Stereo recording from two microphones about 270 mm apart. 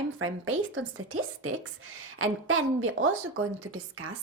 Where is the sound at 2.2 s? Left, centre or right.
Right.